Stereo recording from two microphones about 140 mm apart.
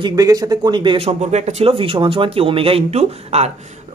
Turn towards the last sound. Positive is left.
turn(degrees=-50)  # may be behind; listen again after turning